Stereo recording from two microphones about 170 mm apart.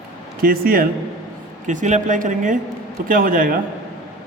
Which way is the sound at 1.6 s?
45° right (ahead or behind).